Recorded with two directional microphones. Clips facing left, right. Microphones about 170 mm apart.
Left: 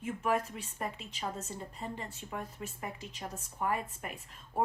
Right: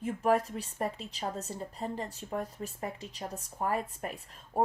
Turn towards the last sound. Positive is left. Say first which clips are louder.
# right 3 dB
turn(degrees=-35)  # may be behind; listen again after turning